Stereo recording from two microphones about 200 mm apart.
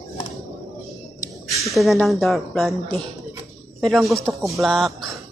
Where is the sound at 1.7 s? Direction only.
Centre (ahead or behind).